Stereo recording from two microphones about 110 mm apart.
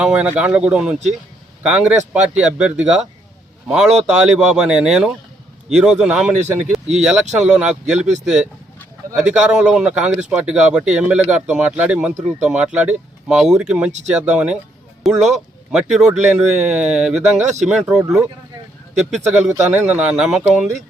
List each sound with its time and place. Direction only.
0.0 s speech: 10° right (ahead or behind)
6.7 s a sound: 5° right (ahead or behind)
7.0 s speech: 5° right (ahead or behind)
7.9 s speech: 90° right
8.2 s speech: 5° right (ahead or behind)
17.4 s speech: 90° right
17.9 s speech: 5° right (ahead or behind)
19.6 s speech: 15° right (ahead or behind)